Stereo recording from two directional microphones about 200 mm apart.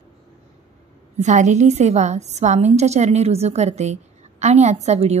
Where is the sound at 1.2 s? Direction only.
35° right (ahead or behind).